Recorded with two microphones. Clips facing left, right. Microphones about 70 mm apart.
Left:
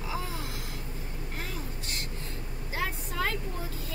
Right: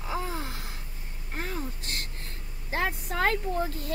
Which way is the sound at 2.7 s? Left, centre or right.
Right.